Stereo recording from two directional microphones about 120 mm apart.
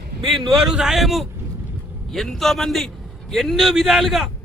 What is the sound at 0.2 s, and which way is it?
Speech, 50° right (ahead or behind).